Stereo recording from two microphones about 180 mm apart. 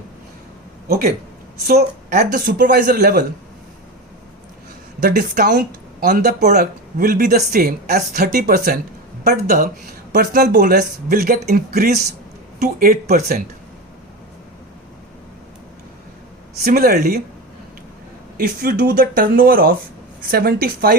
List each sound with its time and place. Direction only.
0.9 s speech: 50° right (ahead or behind)
5.0 s speech: 50° right (ahead or behind)
16.6 s speech: 60° right (ahead or behind)
18.3 s speech: 50° right (ahead or behind)